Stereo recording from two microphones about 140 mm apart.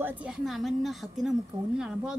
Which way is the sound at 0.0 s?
5° right (ahead or behind).